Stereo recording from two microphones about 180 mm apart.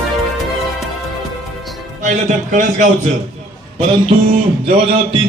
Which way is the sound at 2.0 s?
45° right (ahead or behind).